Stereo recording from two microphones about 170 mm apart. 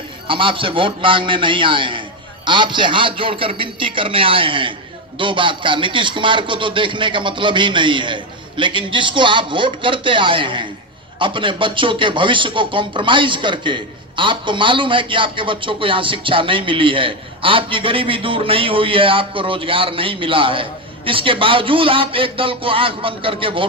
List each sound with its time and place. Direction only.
0.3 s speech: 30° right (ahead or behind)